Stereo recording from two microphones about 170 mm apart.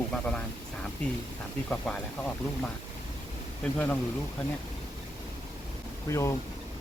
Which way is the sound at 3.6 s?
10° left (ahead or behind).